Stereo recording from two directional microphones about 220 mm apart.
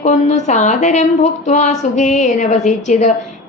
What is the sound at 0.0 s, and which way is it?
Speech, 30° left (ahead or behind).